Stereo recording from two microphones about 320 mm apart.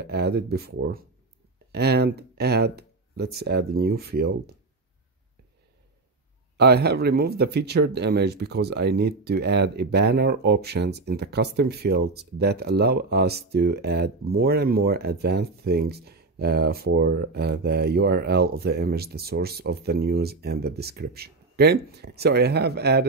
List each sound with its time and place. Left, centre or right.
0.0 s speech: right
6.5 s speech: right